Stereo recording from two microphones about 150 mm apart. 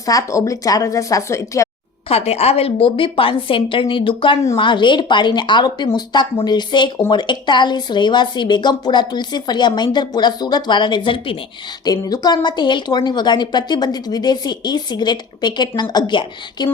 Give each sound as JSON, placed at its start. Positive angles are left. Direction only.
{"t": 0.0, "sound": "a woman's voice", "side_deg": 20}
{"t": 2.0, "sound": "a woman's voice", "side_deg": 45}